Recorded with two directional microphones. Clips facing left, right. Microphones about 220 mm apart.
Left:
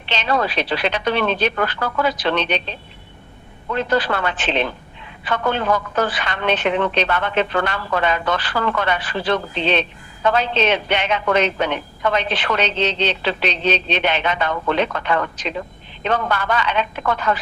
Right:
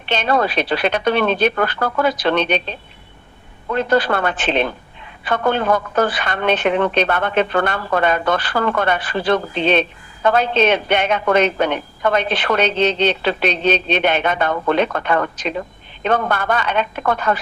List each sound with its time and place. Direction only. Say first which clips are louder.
0.1 s a woman's voice: right 3 dB; 50° right (ahead or behind)